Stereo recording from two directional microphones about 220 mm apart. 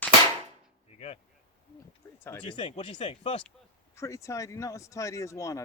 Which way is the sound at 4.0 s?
15° left (ahead or behind).